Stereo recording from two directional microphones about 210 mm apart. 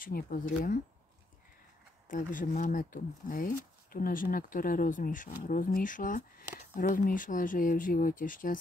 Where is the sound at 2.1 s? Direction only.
40° left (ahead or behind).